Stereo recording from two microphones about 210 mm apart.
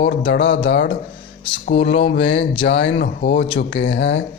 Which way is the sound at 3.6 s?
60° left (ahead or behind).